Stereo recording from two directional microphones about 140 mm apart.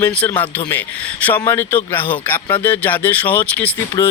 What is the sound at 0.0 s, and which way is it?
Speech, 10° left (ahead or behind).